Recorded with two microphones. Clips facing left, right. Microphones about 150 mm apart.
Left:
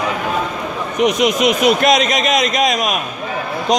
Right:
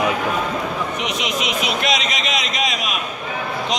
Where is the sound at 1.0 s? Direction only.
45° left (ahead or behind).